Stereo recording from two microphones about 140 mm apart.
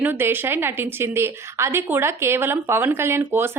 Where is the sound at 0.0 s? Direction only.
15° right (ahead or behind).